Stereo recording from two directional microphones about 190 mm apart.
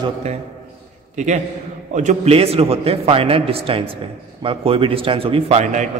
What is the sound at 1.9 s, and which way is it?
A man's voice, 40° right (ahead or behind).